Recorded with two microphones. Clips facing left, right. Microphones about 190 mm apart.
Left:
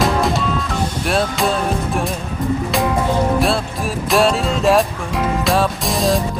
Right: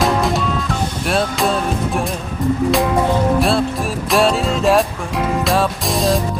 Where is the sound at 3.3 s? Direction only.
Centre (ahead or behind).